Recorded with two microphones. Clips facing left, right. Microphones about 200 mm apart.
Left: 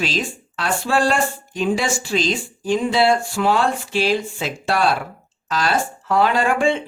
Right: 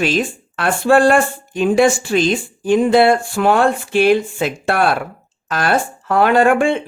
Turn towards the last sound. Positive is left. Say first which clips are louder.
# right 5 dB
turn(degrees=-55)  # may be behind; listen again after turning